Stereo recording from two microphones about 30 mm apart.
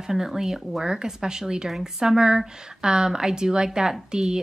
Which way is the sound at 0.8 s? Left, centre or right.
Right.